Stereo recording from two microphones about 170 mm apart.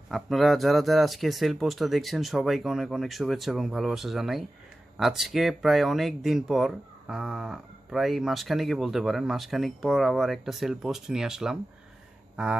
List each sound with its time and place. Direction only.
0.1 s speech: centre (ahead or behind)